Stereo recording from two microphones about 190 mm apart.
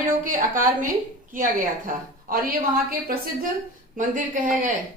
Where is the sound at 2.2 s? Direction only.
50° right (ahead or behind).